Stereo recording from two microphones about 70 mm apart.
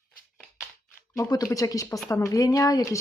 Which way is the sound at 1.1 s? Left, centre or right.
Left.